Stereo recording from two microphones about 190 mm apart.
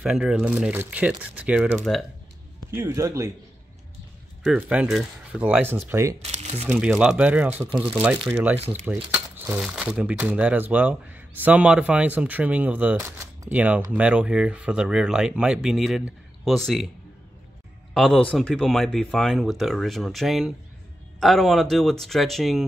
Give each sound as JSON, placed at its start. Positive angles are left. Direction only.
{"t": 0.0, "sound": "speech", "side_deg": -5}
{"t": 2.7, "sound": "speech", "side_deg": -15}
{"t": 4.4, "sound": "speech", "side_deg": -5}
{"t": 6.2, "sound": "speech", "side_deg": -35}
{"t": 6.6, "sound": "speech", "side_deg": -10}
{"t": 8.5, "sound": "speech", "side_deg": -30}
{"t": 8.8, "sound": "speech", "side_deg": -10}
{"t": 17.9, "sound": "speech", "side_deg": 0}